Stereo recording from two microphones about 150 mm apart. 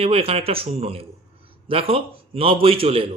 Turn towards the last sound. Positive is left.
turn(degrees=-40)  # may be behind; listen again after turning